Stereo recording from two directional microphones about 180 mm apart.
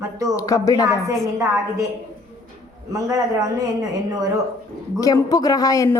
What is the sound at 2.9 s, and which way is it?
A man's voice, 20° right (ahead or behind).